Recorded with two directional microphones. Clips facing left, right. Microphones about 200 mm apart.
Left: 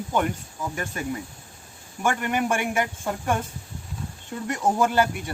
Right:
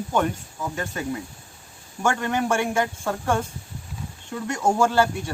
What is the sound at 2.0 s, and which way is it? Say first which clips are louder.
Speech: right 1 dB; 15° left (ahead or behind).